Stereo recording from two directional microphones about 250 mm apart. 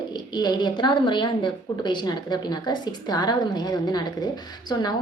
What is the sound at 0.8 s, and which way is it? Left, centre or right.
Speech, centre.